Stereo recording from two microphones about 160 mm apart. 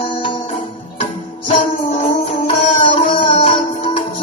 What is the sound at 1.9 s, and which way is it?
Music, 40° left (ahead or behind).